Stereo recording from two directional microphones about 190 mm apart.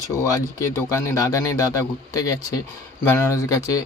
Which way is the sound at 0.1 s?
20° left (ahead or behind).